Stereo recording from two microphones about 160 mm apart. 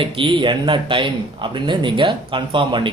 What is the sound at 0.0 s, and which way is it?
A man's voice, 35° right (ahead or behind).